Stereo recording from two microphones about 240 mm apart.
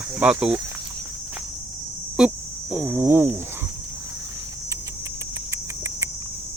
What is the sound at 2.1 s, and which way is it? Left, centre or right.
Speech, centre.